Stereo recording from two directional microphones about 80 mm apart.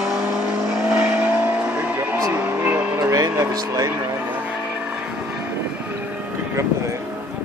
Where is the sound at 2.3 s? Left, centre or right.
Centre.